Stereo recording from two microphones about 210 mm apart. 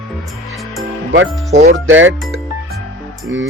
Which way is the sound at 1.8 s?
65° right (ahead or behind).